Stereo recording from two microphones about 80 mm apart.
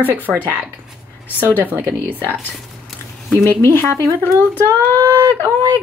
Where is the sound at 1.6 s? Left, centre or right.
Right.